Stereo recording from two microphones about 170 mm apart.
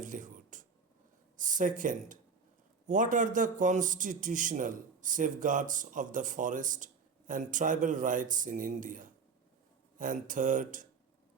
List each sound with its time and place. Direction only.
0.0 s whispering: 50° right (ahead or behind)
1.4 s a man's voice: 50° right (ahead or behind)